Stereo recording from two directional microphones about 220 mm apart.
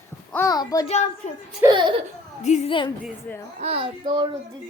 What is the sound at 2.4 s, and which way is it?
Speech, 30° left (ahead or behind).